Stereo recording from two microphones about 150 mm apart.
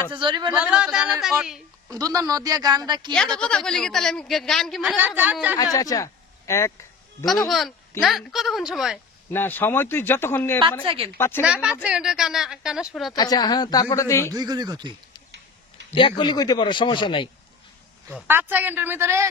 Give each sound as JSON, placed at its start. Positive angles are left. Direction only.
{"t": 0.1, "sound": "speech", "side_deg": -30}
{"t": 0.5, "sound": "speech", "side_deg": -10}
{"t": 1.9, "sound": "a woman's voice", "side_deg": -25}
{"t": 3.3, "sound": "a woman's voice", "side_deg": 5}
{"t": 4.9, "sound": "speech", "side_deg": -10}
{"t": 5.6, "sound": "speech", "side_deg": 25}
{"t": 7.4, "sound": "a woman's voice", "side_deg": 0}
{"t": 9.3, "sound": "speech", "side_deg": 15}
{"t": 11.4, "sound": "a woman's voice", "side_deg": -5}
{"t": 13.1, "sound": "speech", "side_deg": 25}
{"t": 14.3, "sound": "a woman's voice", "side_deg": -25}
{"t": 15.9, "sound": "a man's voice", "side_deg": 35}
{"t": 18.2, "sound": "speech", "side_deg": -15}